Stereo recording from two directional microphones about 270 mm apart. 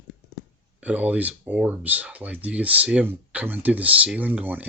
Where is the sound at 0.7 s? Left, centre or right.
Centre.